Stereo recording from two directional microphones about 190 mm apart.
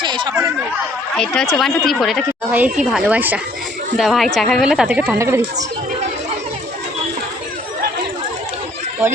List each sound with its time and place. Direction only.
0.0 s chatter: 25° right (ahead or behind)
1.1 s a woman's voice: 5° left (ahead or behind); by 5.6 s 15° right (ahead or behind)